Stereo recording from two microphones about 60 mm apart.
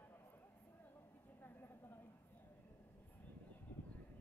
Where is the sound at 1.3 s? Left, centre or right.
Left.